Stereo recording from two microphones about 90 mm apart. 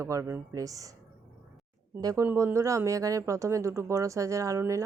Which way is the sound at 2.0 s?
35° right (ahead or behind).